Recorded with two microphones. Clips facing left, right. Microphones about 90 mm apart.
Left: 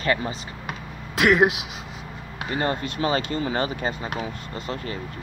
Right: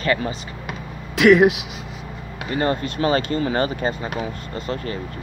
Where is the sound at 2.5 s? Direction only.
20° left (ahead or behind).